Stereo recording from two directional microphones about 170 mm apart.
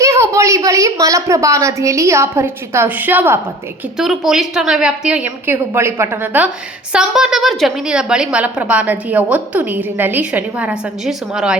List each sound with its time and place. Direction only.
0.0 s a woman's voice: 15° right (ahead or behind)
3.9 s a woman's voice: centre (ahead or behind)